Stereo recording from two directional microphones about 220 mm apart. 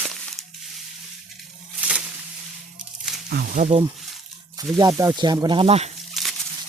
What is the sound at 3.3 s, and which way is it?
Speech, 35° right (ahead or behind).